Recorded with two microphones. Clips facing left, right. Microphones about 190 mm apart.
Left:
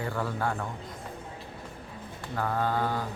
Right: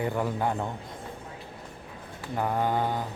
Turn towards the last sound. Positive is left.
turn(degrees=-20)  # may be behind; listen again after turning